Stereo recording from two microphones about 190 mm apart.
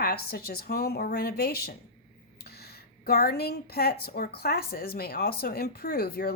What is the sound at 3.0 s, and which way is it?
A woman's voice, 55° left (ahead or behind).